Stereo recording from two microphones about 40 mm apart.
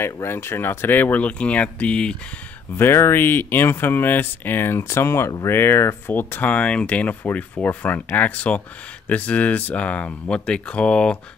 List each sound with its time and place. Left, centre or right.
0.0 s speech: left
0.9 s speech: left
1.2 s speech: left
2.8 s speech: left
6.4 s speech: left
7.6 s speech: left